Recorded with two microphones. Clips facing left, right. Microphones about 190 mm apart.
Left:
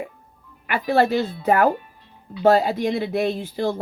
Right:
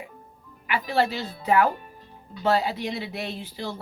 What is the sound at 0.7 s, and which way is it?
Speech, 50° left (ahead or behind).